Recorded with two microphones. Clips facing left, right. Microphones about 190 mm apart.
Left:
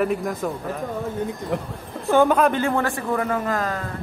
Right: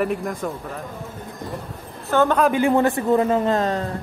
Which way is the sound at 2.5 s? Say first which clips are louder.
Right 5 dB; 15° right (ahead or behind).